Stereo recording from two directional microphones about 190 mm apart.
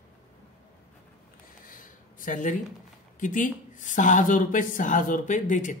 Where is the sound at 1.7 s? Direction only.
45° left (ahead or behind).